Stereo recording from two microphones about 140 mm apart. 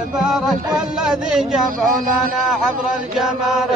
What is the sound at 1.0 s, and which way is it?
Chant, 5° right (ahead or behind).